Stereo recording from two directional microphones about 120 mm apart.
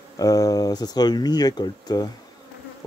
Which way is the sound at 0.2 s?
30° left (ahead or behind).